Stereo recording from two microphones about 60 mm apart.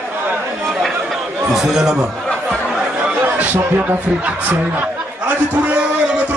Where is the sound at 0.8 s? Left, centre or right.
Centre.